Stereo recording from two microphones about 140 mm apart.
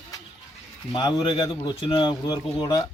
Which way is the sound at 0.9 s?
35° left (ahead or behind).